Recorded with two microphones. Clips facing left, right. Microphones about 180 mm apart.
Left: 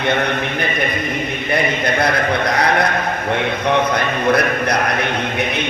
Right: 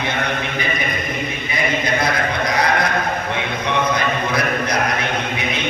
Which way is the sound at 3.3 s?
60° left (ahead or behind).